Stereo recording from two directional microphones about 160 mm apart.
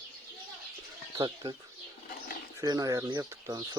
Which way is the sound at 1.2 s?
25° right (ahead or behind).